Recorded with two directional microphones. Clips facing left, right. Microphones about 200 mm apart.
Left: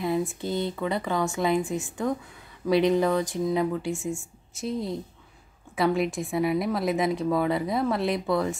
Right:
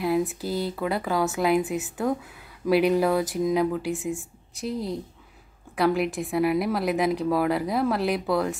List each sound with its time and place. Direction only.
0.0 s a woman's voice: 5° right (ahead or behind)